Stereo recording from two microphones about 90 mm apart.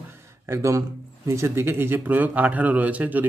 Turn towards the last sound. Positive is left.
turn(degrees=-15)  # may be behind; listen again after turning